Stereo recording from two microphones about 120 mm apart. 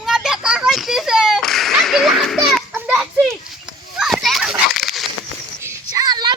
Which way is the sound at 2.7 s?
10° right (ahead or behind).